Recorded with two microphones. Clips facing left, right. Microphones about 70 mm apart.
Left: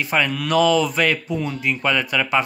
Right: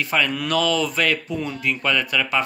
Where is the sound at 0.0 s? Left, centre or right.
Centre.